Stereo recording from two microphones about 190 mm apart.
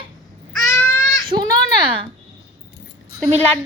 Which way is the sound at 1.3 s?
50° right (ahead or behind).